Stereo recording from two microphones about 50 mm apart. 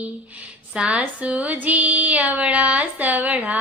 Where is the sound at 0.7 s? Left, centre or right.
Centre.